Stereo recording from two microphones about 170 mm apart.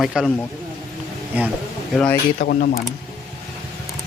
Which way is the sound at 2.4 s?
65° left (ahead or behind).